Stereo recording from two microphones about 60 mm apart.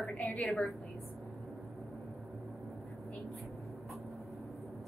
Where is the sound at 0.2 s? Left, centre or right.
Left.